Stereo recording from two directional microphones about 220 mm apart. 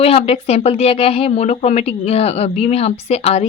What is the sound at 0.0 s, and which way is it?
Speech, 25° left (ahead or behind).